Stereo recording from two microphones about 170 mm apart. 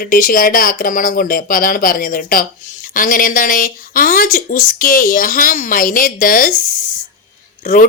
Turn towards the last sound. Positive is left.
turn(degrees=55)  # may be behind; listen again after turning